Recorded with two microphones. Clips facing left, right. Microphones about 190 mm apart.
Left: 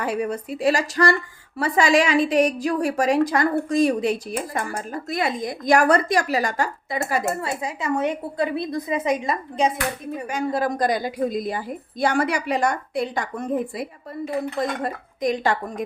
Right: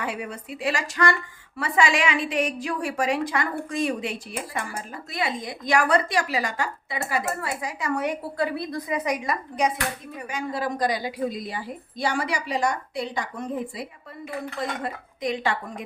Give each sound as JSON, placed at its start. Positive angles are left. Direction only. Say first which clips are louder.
{"t": 0.0, "sound": "a woman's voice", "louder": "left 7 dB", "side_deg": 40}
{"t": 7.4, "sound": "a woman's voice", "louder": "left 3 dB", "side_deg": 25}
{"t": 10.2, "sound": "a woman's voice", "louder": "left 5 dB", "side_deg": 45}